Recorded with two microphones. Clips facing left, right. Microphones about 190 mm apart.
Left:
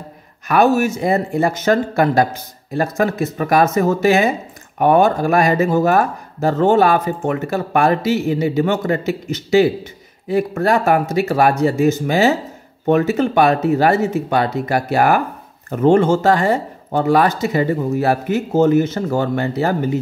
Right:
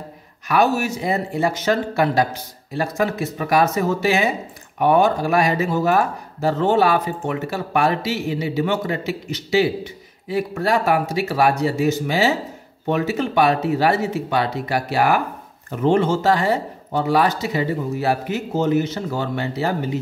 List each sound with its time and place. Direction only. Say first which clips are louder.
0.5 s speech: left 4 dB; 50° left (ahead or behind)